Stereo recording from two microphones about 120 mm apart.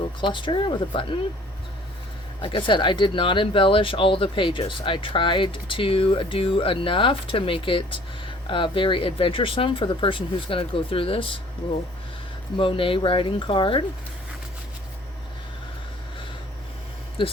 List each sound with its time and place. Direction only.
0.2 s speech: 40° left (ahead or behind)
2.4 s speech: 40° left (ahead or behind)
12.5 s speech: 45° left (ahead or behind)